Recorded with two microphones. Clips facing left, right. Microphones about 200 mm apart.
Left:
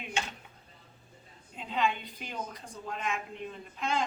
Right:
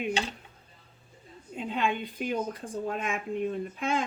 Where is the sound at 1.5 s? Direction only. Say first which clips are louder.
Right 2 dB; 50° right (ahead or behind).